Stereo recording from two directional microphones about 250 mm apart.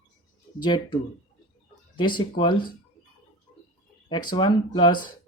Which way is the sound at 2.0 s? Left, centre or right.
Centre.